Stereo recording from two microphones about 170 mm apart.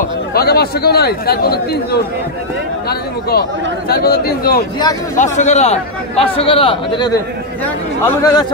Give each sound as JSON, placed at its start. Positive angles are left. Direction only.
{"t": 0.3, "sound": "a man's voice", "side_deg": 65}
{"t": 5.1, "sound": "a man's voice", "side_deg": 45}
{"t": 8.2, "sound": "a man's voice", "side_deg": 25}